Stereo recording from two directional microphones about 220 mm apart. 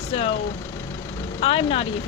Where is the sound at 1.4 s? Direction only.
25° left (ahead or behind).